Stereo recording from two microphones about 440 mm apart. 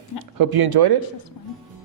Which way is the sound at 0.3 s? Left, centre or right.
Right.